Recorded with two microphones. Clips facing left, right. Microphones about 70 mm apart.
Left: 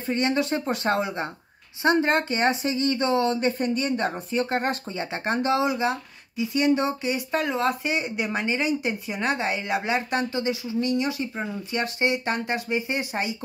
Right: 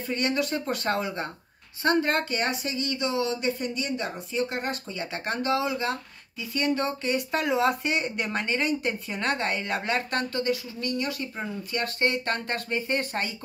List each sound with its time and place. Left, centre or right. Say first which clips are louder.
0.0 s speech: left 3 dB; left